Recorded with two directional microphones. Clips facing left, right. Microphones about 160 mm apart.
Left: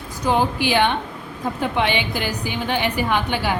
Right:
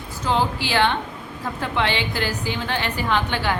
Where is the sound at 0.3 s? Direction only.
15° left (ahead or behind).